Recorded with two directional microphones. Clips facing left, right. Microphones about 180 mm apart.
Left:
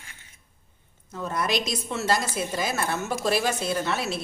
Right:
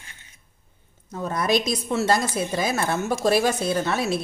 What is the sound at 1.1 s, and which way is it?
A woman's voice, 40° right (ahead or behind).